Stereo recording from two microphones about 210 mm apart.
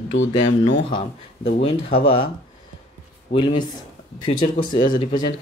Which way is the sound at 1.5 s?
25° left (ahead or behind).